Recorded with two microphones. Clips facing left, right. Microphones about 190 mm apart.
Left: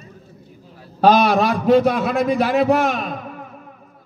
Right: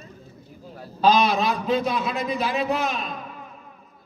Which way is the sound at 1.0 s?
70° left (ahead or behind).